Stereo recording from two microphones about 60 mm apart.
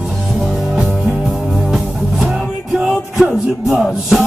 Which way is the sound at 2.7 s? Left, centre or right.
Centre.